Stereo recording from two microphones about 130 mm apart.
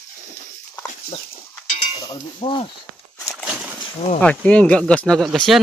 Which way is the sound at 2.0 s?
40° left (ahead or behind).